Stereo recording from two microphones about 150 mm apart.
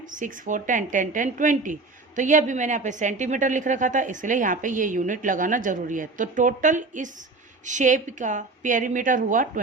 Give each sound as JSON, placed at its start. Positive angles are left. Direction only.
{"t": 0.0, "sound": "a woman's voice", "side_deg": -60}